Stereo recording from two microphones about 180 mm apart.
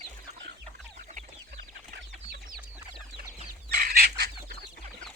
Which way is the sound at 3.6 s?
60° right (ahead or behind).